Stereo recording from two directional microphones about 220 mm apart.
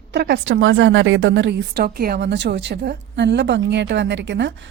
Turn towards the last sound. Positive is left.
turn(degrees=-55)  # may be behind; listen again after turning